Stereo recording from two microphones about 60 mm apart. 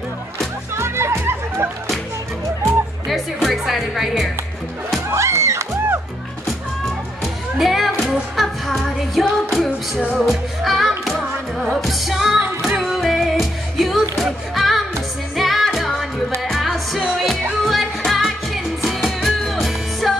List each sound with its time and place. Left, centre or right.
0.7 s music: right
3.1 s music: centre
5.1 s music: right
7.5 s music: centre